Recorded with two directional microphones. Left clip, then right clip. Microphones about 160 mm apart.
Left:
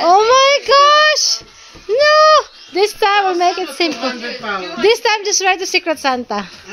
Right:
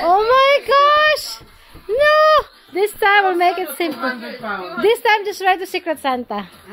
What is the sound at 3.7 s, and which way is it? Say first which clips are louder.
A woman's voice: left 3 dB; centre (ahead or behind).